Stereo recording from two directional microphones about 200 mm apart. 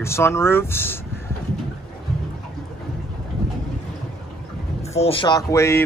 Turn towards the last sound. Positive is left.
turn(degrees=15)  # may be behind; listen again after turning